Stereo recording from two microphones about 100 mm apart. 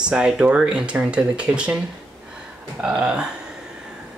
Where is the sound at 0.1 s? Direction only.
10° right (ahead or behind).